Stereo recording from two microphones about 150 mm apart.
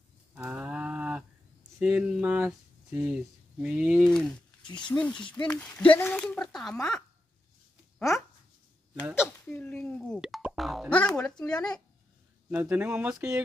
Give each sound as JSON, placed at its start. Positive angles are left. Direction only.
{"t": 0.3, "sound": "a sound", "side_deg": -10}
{"t": 1.8, "sound": "speech", "side_deg": -5}
{"t": 4.6, "sound": "speech", "side_deg": 30}
{"t": 4.9, "sound": "speech", "side_deg": 5}
{"t": 9.5, "sound": "speech", "side_deg": 10}
{"t": 12.5, "sound": "speech", "side_deg": -10}